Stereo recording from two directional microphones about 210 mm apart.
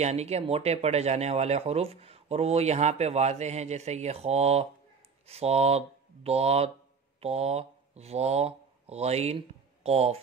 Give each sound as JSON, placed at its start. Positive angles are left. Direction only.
{"t": 0.0, "sound": "speech", "side_deg": -30}